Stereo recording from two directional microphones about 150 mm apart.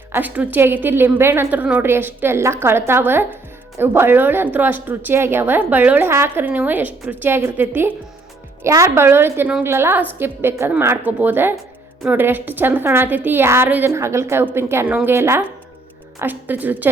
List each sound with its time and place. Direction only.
0.1 s a woman's voice: 10° right (ahead or behind)